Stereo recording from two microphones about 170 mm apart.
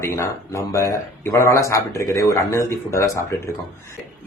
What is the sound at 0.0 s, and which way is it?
Speech, 15° left (ahead or behind).